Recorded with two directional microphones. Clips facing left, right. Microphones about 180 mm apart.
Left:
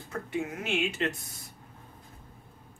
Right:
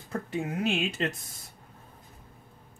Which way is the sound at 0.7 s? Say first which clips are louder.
Right 1 dB; 35° right (ahead or behind).